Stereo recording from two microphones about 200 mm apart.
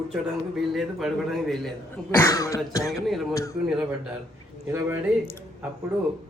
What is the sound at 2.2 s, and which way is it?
Throat clearing, 15° left (ahead or behind).